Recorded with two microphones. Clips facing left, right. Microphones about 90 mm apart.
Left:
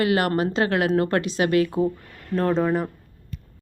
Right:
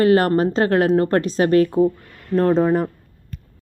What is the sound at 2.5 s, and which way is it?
Speech, 15° right (ahead or behind).